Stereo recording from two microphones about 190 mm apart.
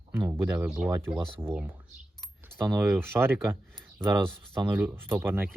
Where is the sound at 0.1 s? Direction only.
10° right (ahead or behind).